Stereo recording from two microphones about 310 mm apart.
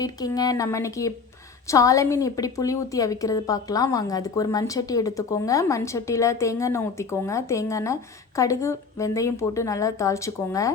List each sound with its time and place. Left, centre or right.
0.0 s a woman's voice: centre